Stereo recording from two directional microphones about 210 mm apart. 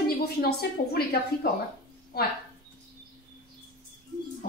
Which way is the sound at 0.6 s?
45° left (ahead or behind).